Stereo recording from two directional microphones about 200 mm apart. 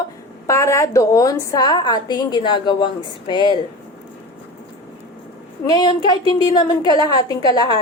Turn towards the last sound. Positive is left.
turn(degrees=20)  # may be behind; listen again after turning